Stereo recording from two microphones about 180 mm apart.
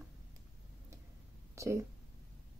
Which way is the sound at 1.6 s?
15° right (ahead or behind).